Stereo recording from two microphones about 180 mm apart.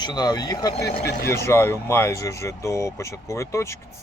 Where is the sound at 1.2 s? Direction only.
15° left (ahead or behind).